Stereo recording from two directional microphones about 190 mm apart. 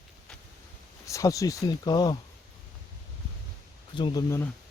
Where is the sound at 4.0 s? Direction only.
25° left (ahead or behind).